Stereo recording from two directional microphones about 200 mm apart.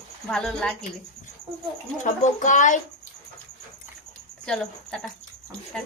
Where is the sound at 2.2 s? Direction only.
40° left (ahead or behind).